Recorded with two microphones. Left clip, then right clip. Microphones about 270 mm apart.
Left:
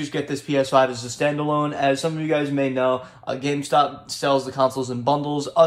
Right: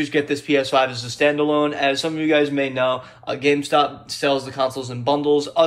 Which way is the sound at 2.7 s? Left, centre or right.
Left.